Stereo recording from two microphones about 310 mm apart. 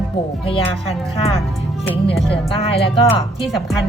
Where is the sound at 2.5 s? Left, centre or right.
Centre.